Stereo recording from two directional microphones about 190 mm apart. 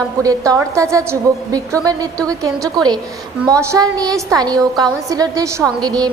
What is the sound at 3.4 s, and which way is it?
A woman's voice, 15° right (ahead or behind).